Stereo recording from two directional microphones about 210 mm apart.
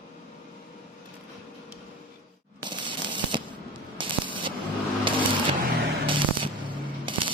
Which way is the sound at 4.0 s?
25° right (ahead or behind).